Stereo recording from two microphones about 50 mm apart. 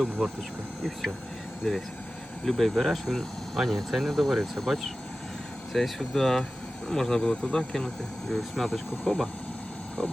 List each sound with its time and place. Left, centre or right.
1.6 s speech: centre
8.3 s speech: centre
10.0 s a sound: left